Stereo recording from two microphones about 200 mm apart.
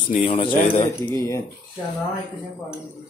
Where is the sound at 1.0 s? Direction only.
15° left (ahead or behind).